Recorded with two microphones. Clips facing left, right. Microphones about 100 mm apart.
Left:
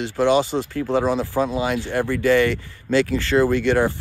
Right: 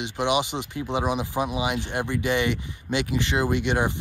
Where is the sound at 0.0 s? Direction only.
15° right (ahead or behind).